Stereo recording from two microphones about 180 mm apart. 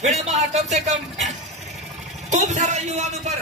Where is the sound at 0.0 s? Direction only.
40° right (ahead or behind).